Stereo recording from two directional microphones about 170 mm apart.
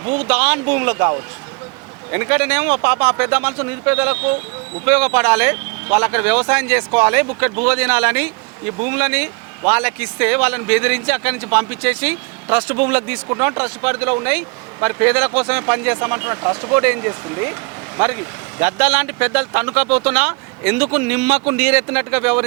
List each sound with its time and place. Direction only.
0.0 s speech: 40° right (ahead or behind)
0.3 s speech: 10° right (ahead or behind)